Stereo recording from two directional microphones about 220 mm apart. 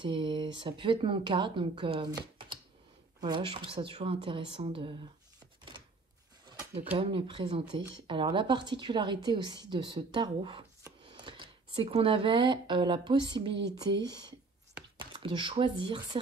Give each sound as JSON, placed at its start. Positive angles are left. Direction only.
{"t": 0.0, "sound": "speech", "side_deg": -20}
{"t": 7.0, "sound": "speech", "side_deg": -25}